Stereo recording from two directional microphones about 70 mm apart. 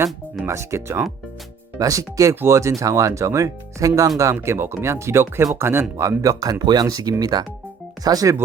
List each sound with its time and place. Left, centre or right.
0.4 s speech: right
1.8 s speech: right
4.2 s speech: right
6.0 s speech: right
6.8 s speech: right